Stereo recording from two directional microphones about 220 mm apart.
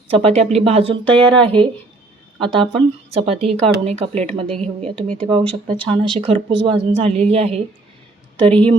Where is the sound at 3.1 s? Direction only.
25° right (ahead or behind).